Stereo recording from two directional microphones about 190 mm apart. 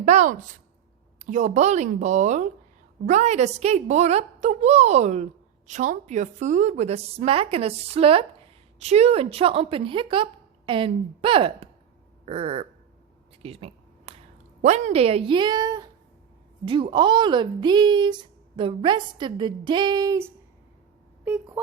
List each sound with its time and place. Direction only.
0.0 s a woman's voice: 40° right (ahead or behind)
12.2 s a sound: 30° right (ahead or behind)
14.6 s a woman's voice: 40° right (ahead or behind); by 21.6 s 5° right (ahead or behind)